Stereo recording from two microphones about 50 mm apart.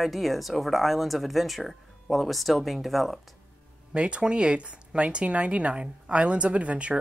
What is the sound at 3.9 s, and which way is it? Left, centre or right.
Speech, right.